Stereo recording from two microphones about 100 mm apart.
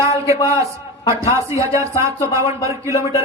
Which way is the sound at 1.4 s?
30° right (ahead or behind).